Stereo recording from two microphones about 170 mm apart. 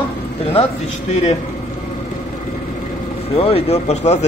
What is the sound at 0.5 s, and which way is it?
Speech, 35° left (ahead or behind).